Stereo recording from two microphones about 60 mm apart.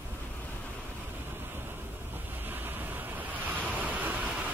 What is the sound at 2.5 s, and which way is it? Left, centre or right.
Waves, right.